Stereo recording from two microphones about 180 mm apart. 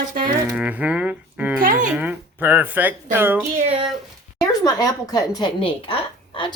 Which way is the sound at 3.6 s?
30° right (ahead or behind).